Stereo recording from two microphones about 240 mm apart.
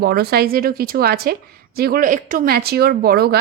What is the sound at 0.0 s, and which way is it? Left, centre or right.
A woman's voice, right.